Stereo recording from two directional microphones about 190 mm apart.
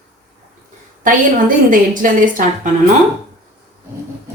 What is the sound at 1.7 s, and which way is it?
Speech, 45° right (ahead or behind).